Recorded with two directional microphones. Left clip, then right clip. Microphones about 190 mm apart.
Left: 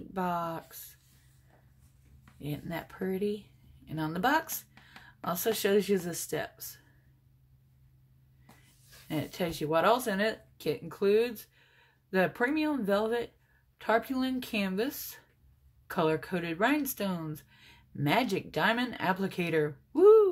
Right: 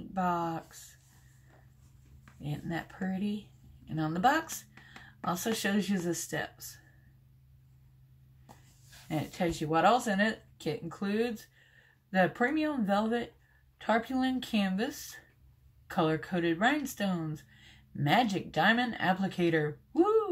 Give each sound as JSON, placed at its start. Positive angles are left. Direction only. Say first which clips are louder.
{"t": 0.1, "sound": "speech", "louder": "right 1 dB", "side_deg": 45}
{"t": 2.4, "sound": "speech", "louder": "even", "side_deg": 45}
{"t": 9.1, "sound": "speech", "louder": "right 1 dB", "side_deg": 45}